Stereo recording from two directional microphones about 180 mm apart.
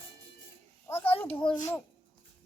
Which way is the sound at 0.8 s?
15° left (ahead or behind).